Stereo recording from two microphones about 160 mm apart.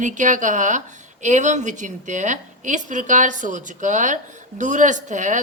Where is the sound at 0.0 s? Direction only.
50° right (ahead or behind).